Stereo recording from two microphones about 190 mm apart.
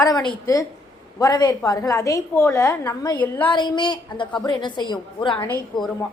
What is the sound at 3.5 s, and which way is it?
A woman's voice, 25° left (ahead or behind).